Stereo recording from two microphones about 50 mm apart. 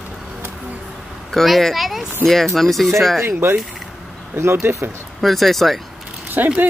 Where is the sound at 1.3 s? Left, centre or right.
Centre.